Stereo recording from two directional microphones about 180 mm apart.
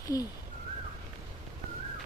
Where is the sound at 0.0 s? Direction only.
20° left (ahead or behind).